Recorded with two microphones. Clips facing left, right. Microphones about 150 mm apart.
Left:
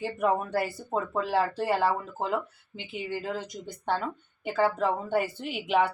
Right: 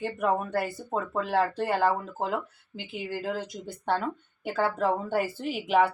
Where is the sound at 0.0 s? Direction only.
Centre (ahead or behind).